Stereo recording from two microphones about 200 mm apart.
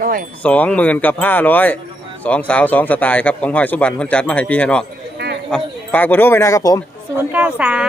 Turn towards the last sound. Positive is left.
turn(degrees=-5)  # may be behind; listen again after turning